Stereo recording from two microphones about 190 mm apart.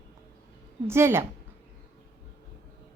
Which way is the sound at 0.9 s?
15° right (ahead or behind).